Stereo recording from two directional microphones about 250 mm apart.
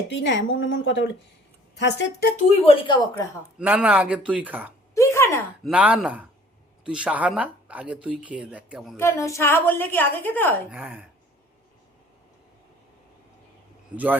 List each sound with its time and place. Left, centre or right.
0.1 s a woman's voice: left
2.6 s a woman's voice: centre
3.6 s speech: centre
4.9 s a sound: centre
5.6 s speech: centre
9.0 s a woman's voice: centre
10.7 s speech: centre
13.9 s speech: centre